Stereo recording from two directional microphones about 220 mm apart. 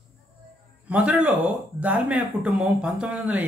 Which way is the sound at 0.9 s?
5° right (ahead or behind).